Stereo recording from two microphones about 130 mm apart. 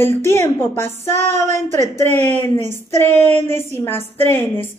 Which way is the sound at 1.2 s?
65° right (ahead or behind).